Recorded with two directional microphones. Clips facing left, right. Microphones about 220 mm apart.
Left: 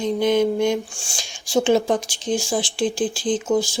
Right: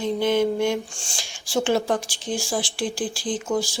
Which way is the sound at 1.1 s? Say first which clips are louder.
Left 4 dB; 20° left (ahead or behind).